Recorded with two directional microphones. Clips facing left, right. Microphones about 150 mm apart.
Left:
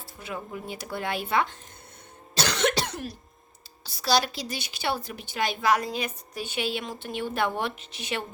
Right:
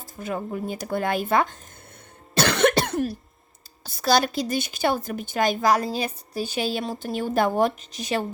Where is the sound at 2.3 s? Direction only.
55° right (ahead or behind).